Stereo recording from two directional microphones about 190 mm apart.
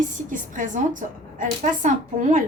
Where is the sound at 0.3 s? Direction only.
45° right (ahead or behind).